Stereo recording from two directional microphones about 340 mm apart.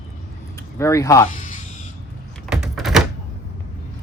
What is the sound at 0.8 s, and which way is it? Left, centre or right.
Speech, centre.